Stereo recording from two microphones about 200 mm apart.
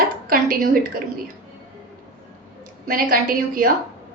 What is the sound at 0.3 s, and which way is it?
Speech, 45° right (ahead or behind).